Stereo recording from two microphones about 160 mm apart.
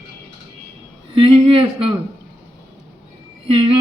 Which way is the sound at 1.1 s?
35° right (ahead or behind).